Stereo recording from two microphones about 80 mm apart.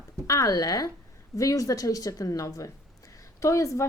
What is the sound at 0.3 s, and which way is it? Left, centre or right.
A woman's voice, left.